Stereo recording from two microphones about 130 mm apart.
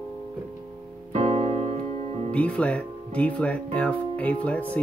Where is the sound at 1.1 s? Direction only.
60° right (ahead or behind).